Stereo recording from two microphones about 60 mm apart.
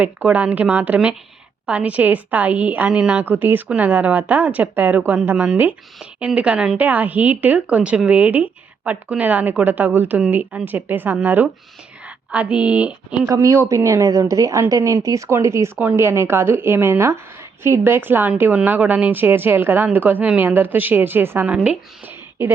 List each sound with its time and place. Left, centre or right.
0.0 s speech: right
3.2 s speech: right
6.1 s a woman's voice: centre
13.2 s a woman's voice: right
21.4 s speech: centre